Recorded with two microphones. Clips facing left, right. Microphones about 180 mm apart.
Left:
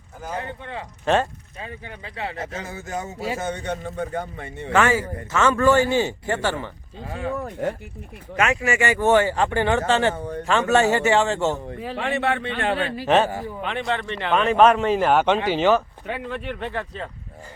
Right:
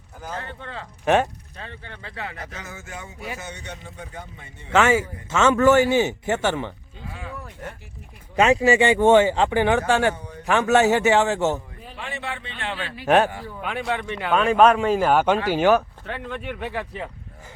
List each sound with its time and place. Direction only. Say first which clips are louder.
0.2 s speech: left 3 dB; 15° left (ahead or behind)
1.0 s a man's voice: right 1 dB; 15° right (ahead or behind)
1.5 s speech: left 4 dB; 10° left (ahead or behind); by 3.2 s 40° left (ahead or behind)
3.3 s a man's voice: left 9 dB; 50° left (ahead or behind)
4.8 s speech: right 1 dB; 20° right (ahead or behind)
7.0 s speech: left 9 dB; 50° left (ahead or behind)
8.4 s a man's voice: right 5 dB; 30° right (ahead or behind)
11.8 s a man's voice: left 9 dB; 85° left; by 12.9 s 55° left (ahead or behind)
13.1 s a man's voice: right 1 dB; 10° right (ahead or behind)
16.0 s a man's voice: left 2 dB; 5° left (ahead or behind); by 17.1 s 10° right (ahead or behind)